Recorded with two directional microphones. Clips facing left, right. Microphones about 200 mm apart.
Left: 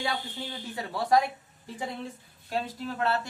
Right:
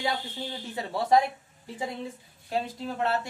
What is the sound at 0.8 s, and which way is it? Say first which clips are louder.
Speech: right 2 dB; 25° right (ahead or behind).